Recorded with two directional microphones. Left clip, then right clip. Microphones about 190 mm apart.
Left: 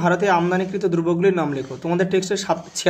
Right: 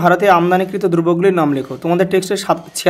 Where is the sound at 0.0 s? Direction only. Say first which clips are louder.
Right 7 dB; 30° right (ahead or behind).